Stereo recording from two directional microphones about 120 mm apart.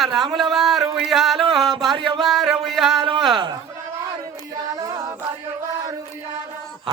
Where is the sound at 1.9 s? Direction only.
40° right (ahead or behind).